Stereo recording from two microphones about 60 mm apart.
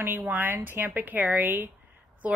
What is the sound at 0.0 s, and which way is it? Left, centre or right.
A woman's voice, right.